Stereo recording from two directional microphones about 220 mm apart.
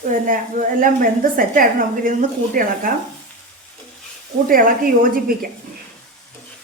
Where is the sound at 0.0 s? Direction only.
35° right (ahead or behind).